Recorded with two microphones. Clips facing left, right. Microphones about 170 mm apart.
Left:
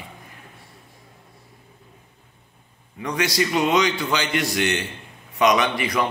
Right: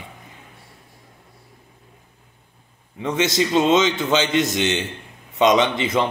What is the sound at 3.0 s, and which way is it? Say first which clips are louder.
A man's voice: right 3 dB; 25° right (ahead or behind).